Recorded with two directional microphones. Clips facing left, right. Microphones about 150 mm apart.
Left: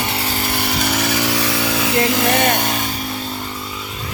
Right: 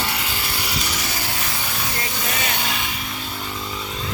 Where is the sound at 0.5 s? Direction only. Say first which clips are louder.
Left 9 dB; 55° left (ahead or behind).